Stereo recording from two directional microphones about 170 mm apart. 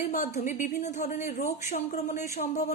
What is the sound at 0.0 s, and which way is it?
A woman's voice, 50° left (ahead or behind).